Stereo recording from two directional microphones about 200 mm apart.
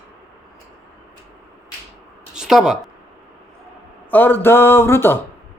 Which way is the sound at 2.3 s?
5° right (ahead or behind).